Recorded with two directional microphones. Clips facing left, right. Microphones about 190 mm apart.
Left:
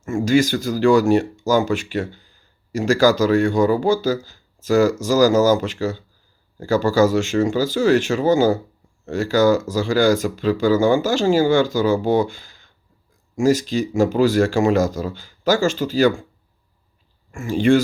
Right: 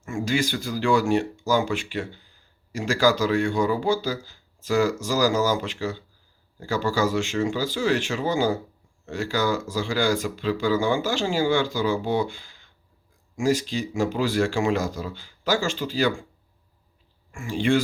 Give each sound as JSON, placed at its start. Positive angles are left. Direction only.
{"t": 0.0, "sound": "speech", "side_deg": 45}
{"t": 17.3, "sound": "speech", "side_deg": 45}